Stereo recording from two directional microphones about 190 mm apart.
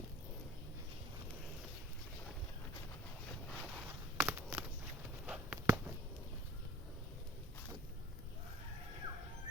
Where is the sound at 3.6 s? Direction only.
5° right (ahead or behind).